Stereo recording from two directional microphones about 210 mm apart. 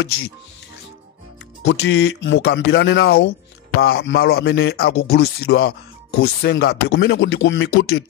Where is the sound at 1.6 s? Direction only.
60° left (ahead or behind).